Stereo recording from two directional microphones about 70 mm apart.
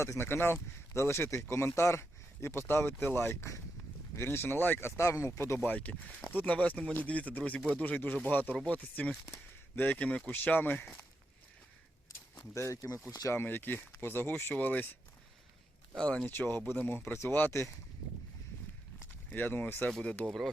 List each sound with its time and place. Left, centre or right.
0.0 s speech: left
5.5 s speech: left
12.5 s speech: left
13.1 s speech: left
13.3 s speech: left
16.0 s speech: centre
16.2 s speech: left
19.3 s speech: left
19.9 s speech: centre